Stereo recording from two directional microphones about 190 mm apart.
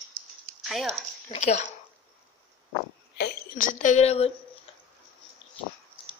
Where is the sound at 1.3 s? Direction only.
35° left (ahead or behind).